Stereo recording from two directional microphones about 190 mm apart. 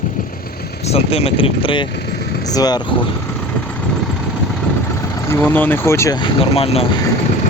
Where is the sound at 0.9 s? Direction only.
30° left (ahead or behind).